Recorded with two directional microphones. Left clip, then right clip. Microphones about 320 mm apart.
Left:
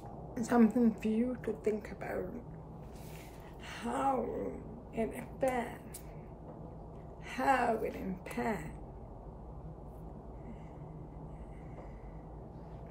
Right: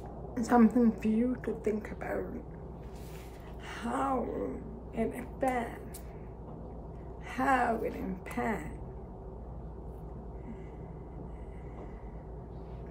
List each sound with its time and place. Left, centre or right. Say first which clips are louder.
0.3 s speech: right 4 dB; centre
3.6 s speech: even; centre
7.2 s speech: right 2 dB; centre